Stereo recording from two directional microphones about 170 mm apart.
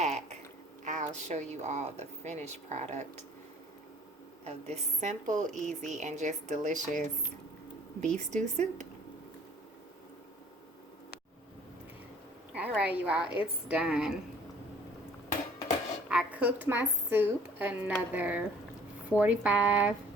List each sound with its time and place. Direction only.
0.0 s a sound: 40° right (ahead or behind)
0.9 s a woman's voice: 45° right (ahead or behind)
4.4 s a woman's voice: 40° right (ahead or behind)
8.0 s a woman's voice: 45° right (ahead or behind)
12.5 s a woman's voice: 10° right (ahead or behind)
13.2 s a woman's voice: 30° left (ahead or behind)
13.7 s a woman's voice: 5° right (ahead or behind)
16.0 s a woman's voice: 5° right (ahead or behind)